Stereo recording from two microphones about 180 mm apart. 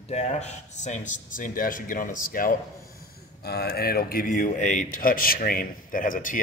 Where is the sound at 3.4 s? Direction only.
65° left (ahead or behind).